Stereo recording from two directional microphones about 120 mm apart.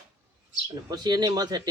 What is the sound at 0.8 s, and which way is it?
Speech, 35° right (ahead or behind).